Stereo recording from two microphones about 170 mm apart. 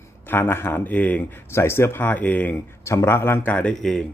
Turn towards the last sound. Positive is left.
turn(degrees=5)  # may be behind; listen again after turning